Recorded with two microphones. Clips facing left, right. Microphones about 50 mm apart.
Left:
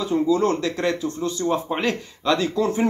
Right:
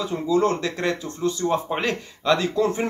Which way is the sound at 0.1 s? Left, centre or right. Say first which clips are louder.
Left 2 dB; centre.